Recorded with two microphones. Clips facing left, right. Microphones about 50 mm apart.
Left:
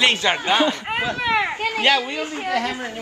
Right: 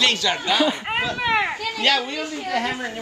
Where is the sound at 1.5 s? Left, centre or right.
Left.